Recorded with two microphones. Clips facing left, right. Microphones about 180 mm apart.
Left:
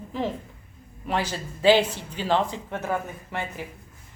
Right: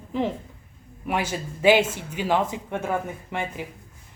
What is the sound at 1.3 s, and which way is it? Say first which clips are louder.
A woman's voice: even; 15° right (ahead or behind).